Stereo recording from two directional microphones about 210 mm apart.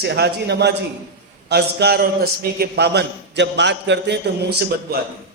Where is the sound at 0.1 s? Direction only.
50° right (ahead or behind).